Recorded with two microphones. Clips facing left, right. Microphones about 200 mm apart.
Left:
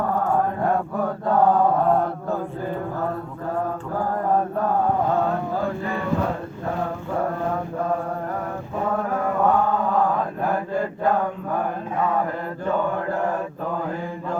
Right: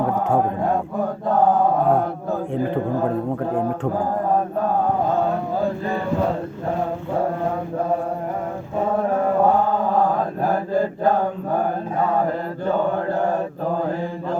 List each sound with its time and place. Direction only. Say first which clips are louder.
9.0 s mantra: right 4 dB; 30° right (ahead or behind)